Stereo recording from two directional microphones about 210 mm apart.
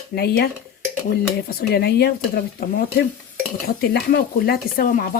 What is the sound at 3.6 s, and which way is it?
Speech, 50° left (ahead or behind).